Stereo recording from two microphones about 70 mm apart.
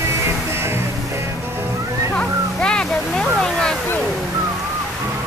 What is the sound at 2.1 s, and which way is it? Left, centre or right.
Music, centre.